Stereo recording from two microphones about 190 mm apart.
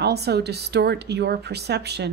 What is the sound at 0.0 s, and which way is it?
Speech, 60° right (ahead or behind).